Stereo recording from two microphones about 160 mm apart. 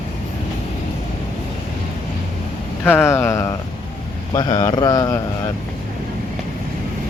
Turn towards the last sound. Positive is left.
turn(degrees=25)  # may be behind; listen again after turning